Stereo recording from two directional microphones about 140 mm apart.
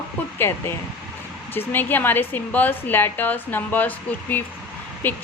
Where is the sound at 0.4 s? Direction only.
20° left (ahead or behind).